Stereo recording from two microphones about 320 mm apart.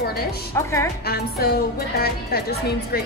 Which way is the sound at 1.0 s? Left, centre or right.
Left.